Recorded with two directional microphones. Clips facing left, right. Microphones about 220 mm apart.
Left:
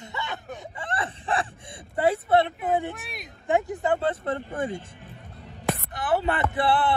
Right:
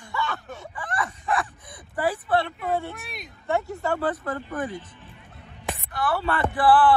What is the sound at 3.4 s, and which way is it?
Speech, 15° left (ahead or behind).